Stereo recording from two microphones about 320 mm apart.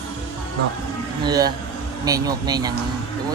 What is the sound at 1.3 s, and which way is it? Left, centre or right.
Speech, centre.